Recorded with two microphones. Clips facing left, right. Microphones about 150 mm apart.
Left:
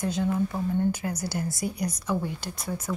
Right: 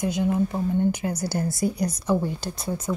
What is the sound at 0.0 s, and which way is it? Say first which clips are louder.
A woman's voice: right 3 dB; 15° right (ahead or behind).